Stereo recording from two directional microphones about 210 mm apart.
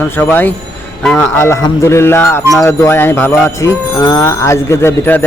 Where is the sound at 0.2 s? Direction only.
10° left (ahead or behind).